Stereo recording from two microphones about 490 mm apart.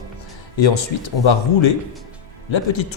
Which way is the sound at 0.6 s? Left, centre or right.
Left.